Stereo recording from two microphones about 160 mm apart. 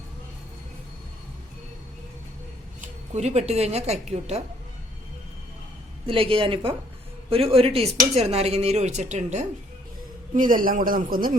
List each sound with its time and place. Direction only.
2.8 s speech: 45° right (ahead or behind)
6.1 s speech: 35° right (ahead or behind)
10.3 s a man's voice: 60° right (ahead or behind)